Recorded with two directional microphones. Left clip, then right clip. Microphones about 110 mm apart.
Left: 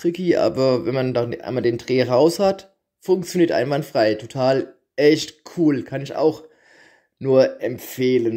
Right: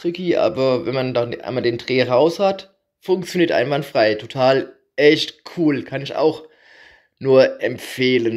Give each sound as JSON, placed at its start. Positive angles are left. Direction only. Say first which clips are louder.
{"t": 0.0, "sound": "speech", "louder": "even", "side_deg": 55}
{"t": 2.2, "sound": "speech", "louder": "even", "side_deg": 60}
{"t": 2.5, "sound": "speech", "louder": "right 2 dB", "side_deg": 35}
{"t": 7.2, "sound": "speech", "louder": "right 3 dB", "side_deg": 20}